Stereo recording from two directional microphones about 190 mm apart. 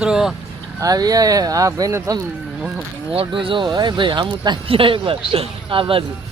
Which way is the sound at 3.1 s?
25° right (ahead or behind).